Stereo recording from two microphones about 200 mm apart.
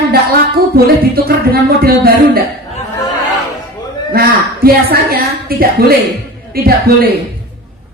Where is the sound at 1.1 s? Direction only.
50° right (ahead or behind).